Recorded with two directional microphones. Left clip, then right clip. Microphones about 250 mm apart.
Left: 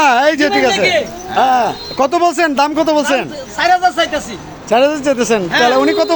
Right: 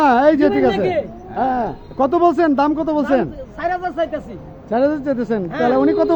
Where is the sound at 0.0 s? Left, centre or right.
Centre.